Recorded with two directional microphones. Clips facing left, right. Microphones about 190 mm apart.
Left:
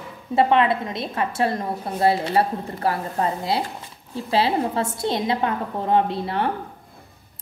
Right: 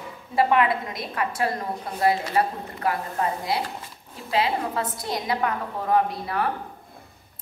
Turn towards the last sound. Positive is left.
turn(degrees=25)  # may be behind; listen again after turning